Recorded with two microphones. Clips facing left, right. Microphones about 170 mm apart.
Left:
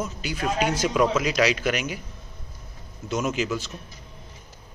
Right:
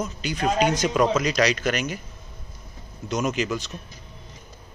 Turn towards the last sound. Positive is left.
turn(degrees=5)  # may be behind; listen again after turning